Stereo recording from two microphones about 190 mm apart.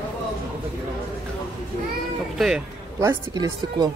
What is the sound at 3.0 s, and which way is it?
Speech, 15° right (ahead or behind).